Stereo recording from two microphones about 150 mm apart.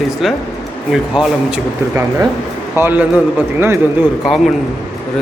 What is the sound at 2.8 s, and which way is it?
A man's voice, 10° right (ahead or behind).